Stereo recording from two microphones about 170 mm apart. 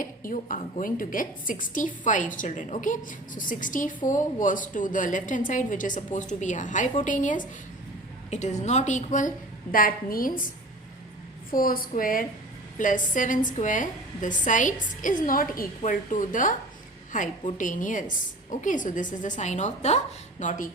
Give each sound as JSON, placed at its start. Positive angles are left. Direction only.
{"t": 0.0, "sound": "a woman's voice", "side_deg": 55}
{"t": 11.5, "sound": "a woman's voice", "side_deg": 55}